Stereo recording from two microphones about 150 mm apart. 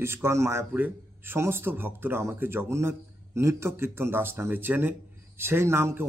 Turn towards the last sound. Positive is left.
turn(degrees=-15)  # may be behind; listen again after turning